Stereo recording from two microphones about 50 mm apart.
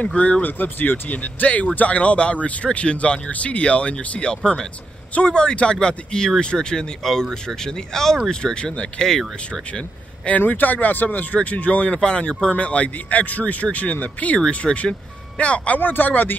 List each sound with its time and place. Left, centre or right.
0.1 s speech: left
0.4 s speech: left; by 10.3 s centre
10.3 s speech: left